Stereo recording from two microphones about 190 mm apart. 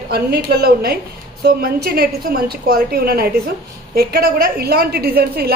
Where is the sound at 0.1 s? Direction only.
55° right (ahead or behind).